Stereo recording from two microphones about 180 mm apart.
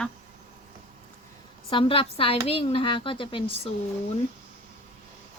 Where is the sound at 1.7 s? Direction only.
30° left (ahead or behind).